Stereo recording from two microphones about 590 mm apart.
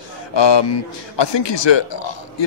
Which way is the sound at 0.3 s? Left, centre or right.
Left.